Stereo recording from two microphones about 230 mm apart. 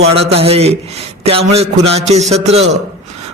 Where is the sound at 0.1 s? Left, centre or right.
Right.